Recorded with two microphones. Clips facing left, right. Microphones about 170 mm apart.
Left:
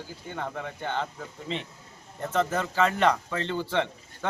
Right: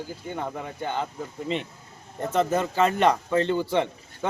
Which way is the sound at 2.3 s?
15° right (ahead or behind).